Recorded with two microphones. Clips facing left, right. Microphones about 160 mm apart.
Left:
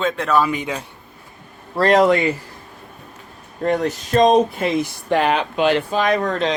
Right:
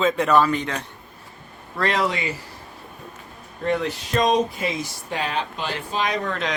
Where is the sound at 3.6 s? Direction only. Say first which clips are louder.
Left 4 dB; 45° left (ahead or behind); by 5.8 s 70° left (ahead or behind).